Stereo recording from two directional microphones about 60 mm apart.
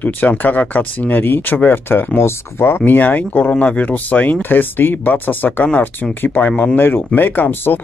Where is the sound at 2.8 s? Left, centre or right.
Left.